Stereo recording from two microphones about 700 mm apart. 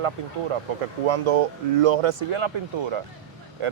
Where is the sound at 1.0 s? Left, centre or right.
Right.